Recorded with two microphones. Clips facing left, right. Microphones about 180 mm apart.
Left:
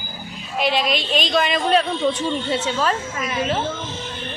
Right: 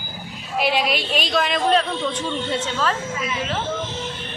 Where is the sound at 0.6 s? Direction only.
10° right (ahead or behind).